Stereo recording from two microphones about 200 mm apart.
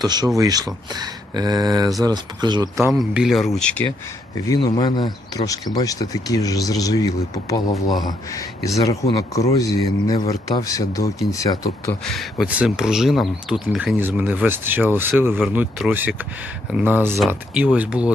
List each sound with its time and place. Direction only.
0.0 s speech: 20° right (ahead or behind)
2.7 s speech: centre (ahead or behind)
4.4 s speech: 20° left (ahead or behind)
7.7 s speech: centre (ahead or behind)
8.0 s speech: 15° left (ahead or behind)
12.0 s speech: centre (ahead or behind)